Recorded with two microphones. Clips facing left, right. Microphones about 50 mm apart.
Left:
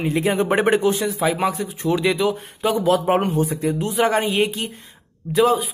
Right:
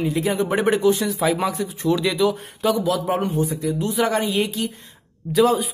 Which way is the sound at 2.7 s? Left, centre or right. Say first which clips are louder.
Left 4 dB; left.